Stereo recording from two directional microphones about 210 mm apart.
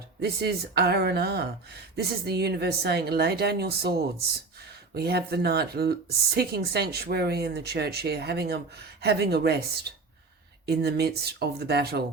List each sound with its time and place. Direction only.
0.2 s speech: 50° right (ahead or behind)